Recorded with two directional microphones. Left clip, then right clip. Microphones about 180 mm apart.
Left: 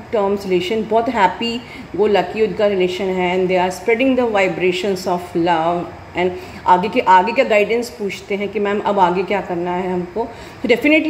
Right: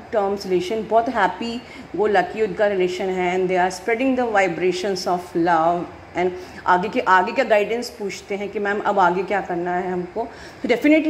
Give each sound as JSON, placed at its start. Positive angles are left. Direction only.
{"t": 0.5, "sound": "a woman's voice", "side_deg": -10}